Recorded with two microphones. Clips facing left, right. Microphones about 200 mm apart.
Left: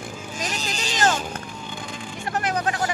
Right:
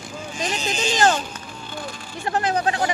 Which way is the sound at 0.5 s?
35° left (ahead or behind).